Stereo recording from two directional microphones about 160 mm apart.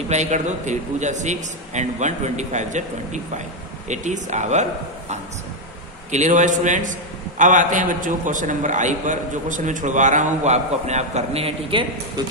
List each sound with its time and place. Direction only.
0.1 s a man's voice: 45° right (ahead or behind)
6.1 s a man's voice: 50° right (ahead or behind)